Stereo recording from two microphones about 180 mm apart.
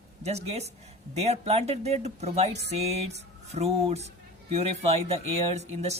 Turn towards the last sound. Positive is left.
turn(degrees=-35)  # may be behind; listen again after turning